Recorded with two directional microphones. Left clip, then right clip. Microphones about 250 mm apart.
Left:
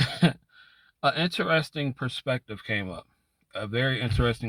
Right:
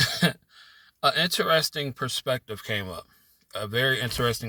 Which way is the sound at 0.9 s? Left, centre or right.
Right.